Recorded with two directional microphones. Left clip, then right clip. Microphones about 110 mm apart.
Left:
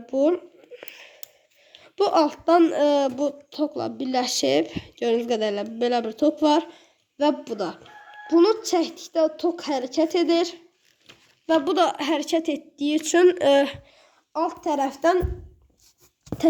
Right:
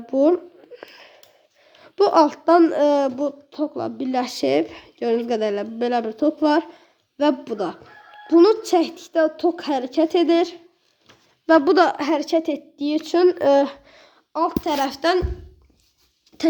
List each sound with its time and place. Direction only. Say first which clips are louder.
0.0 s speech: right 4 dB; 15° right (ahead or behind)
0.6 s a sound: right 1 dB; 5° right (ahead or behind)
1.8 s a woman's voice: right 4 dB; 10° right (ahead or behind)
11.4 s a woman's voice: right 5 dB; 35° right (ahead or behind); by 13.7 s centre (ahead or behind)
13.8 s a sound: right 5 dB; 35° right (ahead or behind)
14.6 s speech: right 1 dB; 15° left (ahead or behind)